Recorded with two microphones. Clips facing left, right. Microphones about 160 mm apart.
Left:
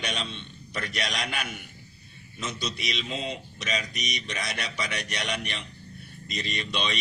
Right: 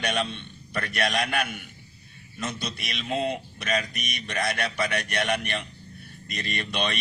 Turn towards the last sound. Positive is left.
turn(degrees=-55)  # may be behind; listen again after turning